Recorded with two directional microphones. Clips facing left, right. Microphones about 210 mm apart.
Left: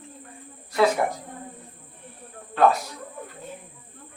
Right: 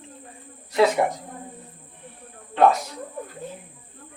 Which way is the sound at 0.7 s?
20° right (ahead or behind).